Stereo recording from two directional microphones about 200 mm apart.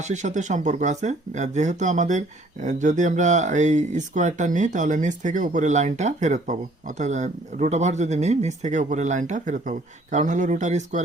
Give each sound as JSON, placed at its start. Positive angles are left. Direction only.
{"t": 0.0, "sound": "speech", "side_deg": -35}